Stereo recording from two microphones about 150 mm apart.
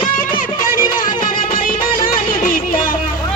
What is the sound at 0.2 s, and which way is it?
Music, 65° left (ahead or behind).